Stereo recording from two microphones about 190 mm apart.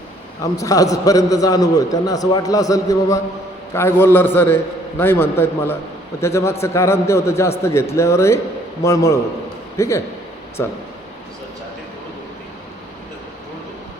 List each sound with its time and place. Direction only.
0.4 s a man's voice: 15° left (ahead or behind)